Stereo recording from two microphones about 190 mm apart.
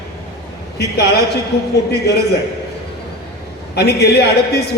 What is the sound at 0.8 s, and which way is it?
Speech, 55° left (ahead or behind).